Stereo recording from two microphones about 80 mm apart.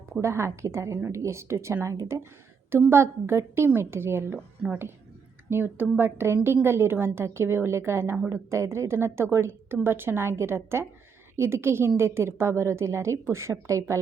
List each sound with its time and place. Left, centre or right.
0.2 s a woman's voice: right
5.5 s a woman's voice: right